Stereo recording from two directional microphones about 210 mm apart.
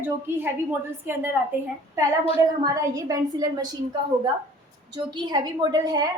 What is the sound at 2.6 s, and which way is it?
A woman's voice, 15° right (ahead or behind).